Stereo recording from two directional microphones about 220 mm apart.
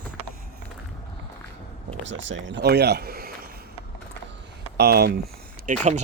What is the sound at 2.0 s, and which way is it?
Speech, 55° right (ahead or behind).